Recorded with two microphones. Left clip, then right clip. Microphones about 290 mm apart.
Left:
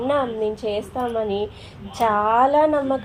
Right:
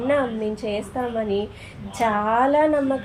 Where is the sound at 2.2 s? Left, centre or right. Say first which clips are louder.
Left 2 dB; centre.